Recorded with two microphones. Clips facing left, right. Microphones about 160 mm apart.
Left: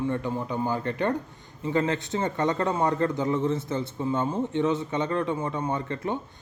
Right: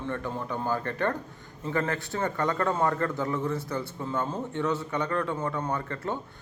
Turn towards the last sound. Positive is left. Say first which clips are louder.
# left 2 dB
turn(degrees=20)  # may be behind; listen again after turning